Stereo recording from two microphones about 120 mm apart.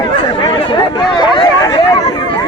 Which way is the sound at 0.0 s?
45° left (ahead or behind).